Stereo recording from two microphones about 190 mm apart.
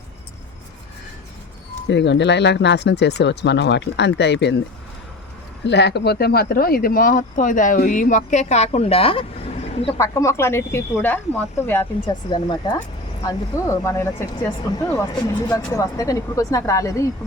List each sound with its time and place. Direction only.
1.9 s speech: 65° left (ahead or behind)
5.6 s speech: 65° left (ahead or behind); by 9.9 s 30° left (ahead or behind)
10.0 s speech: 15° left (ahead or behind)
12.0 s speech: 25° left (ahead or behind)